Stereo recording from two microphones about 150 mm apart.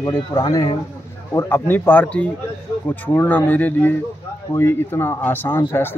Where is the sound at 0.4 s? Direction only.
25° left (ahead or behind).